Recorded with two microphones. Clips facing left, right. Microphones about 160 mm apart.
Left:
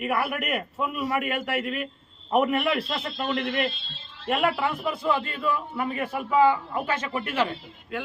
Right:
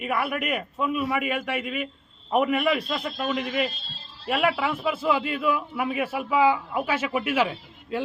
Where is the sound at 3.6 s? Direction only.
40° right (ahead or behind).